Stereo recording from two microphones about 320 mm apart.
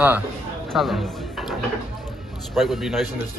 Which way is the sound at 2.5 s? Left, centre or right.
Centre.